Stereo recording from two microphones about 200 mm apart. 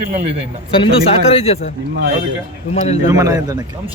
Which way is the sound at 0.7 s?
25° left (ahead or behind).